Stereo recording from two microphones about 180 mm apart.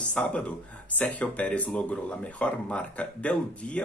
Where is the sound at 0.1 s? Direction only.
5° left (ahead or behind).